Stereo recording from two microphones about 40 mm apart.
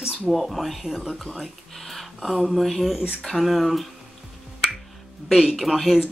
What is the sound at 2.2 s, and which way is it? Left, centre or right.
Speech, centre.